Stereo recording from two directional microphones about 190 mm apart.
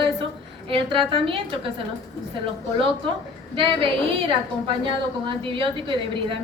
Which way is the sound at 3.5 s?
30° right (ahead or behind).